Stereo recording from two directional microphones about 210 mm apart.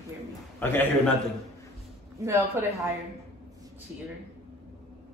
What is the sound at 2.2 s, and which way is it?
Speech, 15° right (ahead or behind).